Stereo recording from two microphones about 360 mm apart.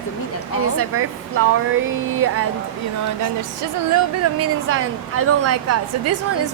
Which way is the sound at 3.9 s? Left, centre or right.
Right.